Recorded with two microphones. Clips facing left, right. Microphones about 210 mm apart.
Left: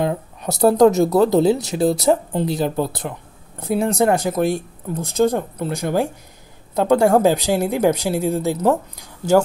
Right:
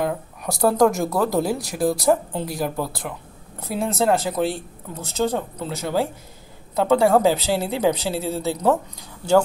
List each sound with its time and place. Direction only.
0.0 s speech: 20° left (ahead or behind)